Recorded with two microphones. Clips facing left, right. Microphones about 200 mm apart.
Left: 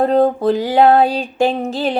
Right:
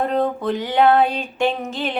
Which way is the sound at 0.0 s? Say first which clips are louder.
Left 7 dB; 35° left (ahead or behind).